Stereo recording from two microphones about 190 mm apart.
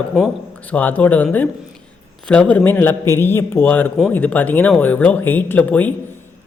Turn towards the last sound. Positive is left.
turn(degrees=10)  # may be behind; listen again after turning